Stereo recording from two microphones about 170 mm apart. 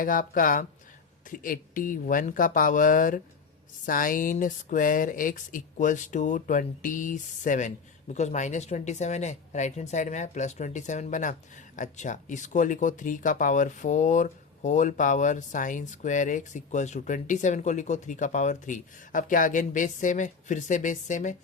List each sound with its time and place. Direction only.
0.0 s speech: 55° left (ahead or behind)